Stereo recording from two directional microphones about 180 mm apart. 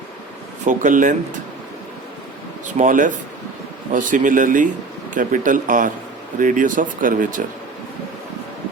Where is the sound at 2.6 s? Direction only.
45° right (ahead or behind).